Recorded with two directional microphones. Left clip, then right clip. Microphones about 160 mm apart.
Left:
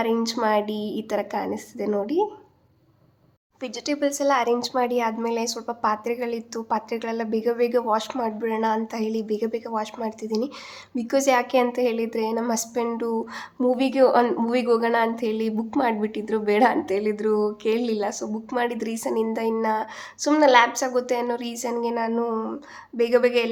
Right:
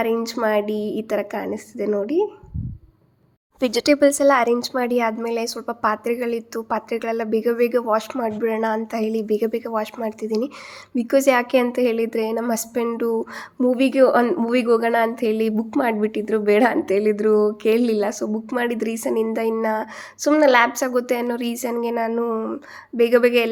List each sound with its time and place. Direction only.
0.0 s a woman's voice: 15° right (ahead or behind)
3.6 s a woman's voice: 50° right (ahead or behind); by 23.5 s 25° right (ahead or behind)